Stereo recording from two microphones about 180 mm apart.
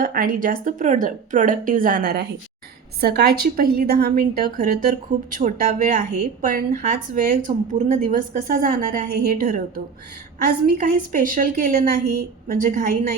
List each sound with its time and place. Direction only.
0.0 s a woman's voice: 55° right (ahead or behind)
10.8 s a woman's voice: 50° right (ahead or behind)